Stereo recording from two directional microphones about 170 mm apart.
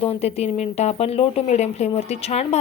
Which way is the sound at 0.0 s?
35° left (ahead or behind).